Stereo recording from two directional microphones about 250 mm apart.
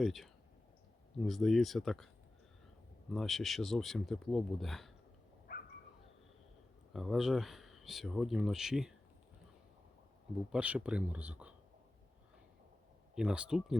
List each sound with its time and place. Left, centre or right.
0.0 s speech: centre
3.1 s speech: centre
5.5 s dog: left
6.9 s speech: centre
10.5 s speech: centre
13.1 s speech: centre